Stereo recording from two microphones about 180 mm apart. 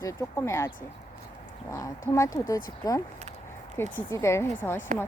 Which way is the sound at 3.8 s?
10° left (ahead or behind).